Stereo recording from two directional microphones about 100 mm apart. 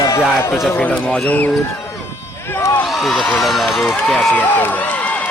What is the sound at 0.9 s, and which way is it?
Speech, 5° left (ahead or behind).